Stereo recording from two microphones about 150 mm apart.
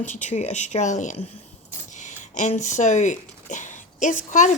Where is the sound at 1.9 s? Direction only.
55° left (ahead or behind).